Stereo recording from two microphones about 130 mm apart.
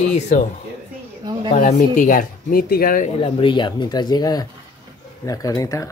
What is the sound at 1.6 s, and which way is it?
Speech, 90° left.